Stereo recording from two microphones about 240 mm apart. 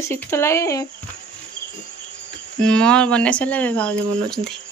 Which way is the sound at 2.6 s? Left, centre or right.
Centre.